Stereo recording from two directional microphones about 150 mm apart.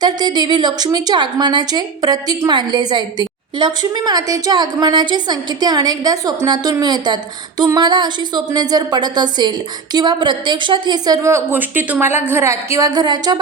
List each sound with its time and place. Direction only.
0.0 s a woman's voice: 30° right (ahead or behind)